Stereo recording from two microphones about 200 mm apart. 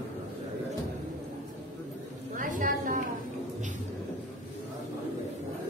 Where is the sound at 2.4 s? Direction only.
40° right (ahead or behind).